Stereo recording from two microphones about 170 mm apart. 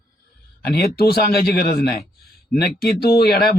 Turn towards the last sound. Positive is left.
turn(degrees=65)  # may be behind; listen again after turning